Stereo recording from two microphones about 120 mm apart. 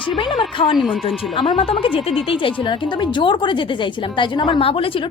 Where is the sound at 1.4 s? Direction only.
45° left (ahead or behind).